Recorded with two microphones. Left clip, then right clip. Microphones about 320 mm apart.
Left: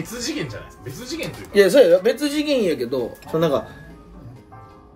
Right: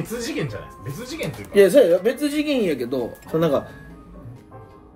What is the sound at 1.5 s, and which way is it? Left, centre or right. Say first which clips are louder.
Speech: left 1 dB; centre.